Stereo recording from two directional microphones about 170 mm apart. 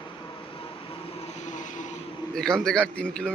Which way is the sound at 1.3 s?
45° left (ahead or behind).